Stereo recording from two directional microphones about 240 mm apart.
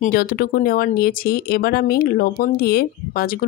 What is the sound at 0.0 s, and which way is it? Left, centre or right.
Speech, left.